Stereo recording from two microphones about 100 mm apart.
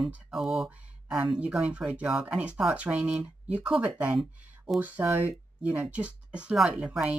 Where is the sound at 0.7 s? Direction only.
10° right (ahead or behind).